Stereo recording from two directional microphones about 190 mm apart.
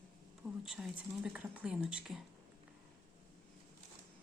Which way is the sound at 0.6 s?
Centre (ahead or behind).